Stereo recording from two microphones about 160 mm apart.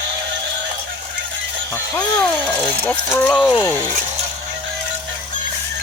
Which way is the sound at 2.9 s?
10° left (ahead or behind).